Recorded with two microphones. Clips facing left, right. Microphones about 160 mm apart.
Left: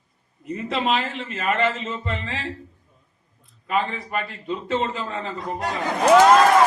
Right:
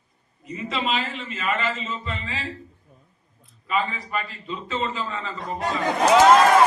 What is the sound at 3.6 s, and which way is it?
A man's voice, 60° left (ahead or behind).